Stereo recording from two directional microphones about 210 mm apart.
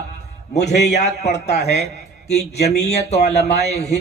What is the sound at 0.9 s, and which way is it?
A man's voice, 30° left (ahead or behind).